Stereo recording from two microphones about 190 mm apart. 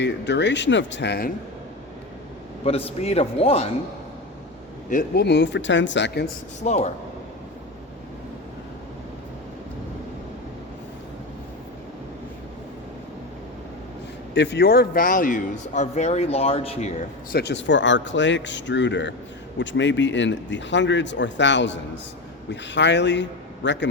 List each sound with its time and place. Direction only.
0.0 s speech: 65° left (ahead or behind)
2.6 s a man's voice: 30° left (ahead or behind)
4.9 s speech: 50° left (ahead or behind); by 6.2 s 70° left (ahead or behind)
6.6 s a man's voice: 35° left (ahead or behind)
14.3 s a man's voice: 65° left (ahead or behind); by 16.9 s 30° left (ahead or behind)
17.3 s speech: 65° left (ahead or behind)